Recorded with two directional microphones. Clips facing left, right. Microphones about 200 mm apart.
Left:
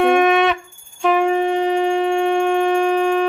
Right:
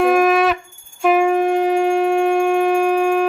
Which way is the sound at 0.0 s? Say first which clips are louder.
Even; centre (ahead or behind).